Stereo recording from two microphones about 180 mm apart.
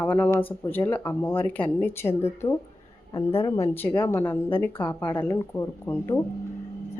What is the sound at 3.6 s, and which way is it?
Speech, 10° left (ahead or behind).